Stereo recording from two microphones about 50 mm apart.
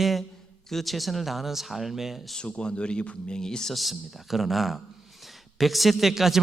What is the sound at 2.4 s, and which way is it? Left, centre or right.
Speech, centre.